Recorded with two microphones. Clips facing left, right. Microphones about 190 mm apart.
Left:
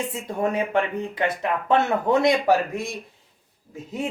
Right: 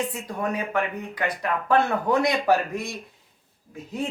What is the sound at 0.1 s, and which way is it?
Speech, 25° left (ahead or behind).